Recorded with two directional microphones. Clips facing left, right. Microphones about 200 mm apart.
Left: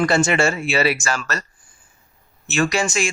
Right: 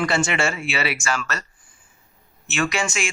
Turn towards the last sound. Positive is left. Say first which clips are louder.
# left 4 dB
turn(degrees=35)  # may be behind; listen again after turning